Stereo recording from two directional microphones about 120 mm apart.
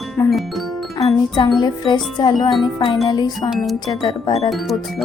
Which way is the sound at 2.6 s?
45° left (ahead or behind).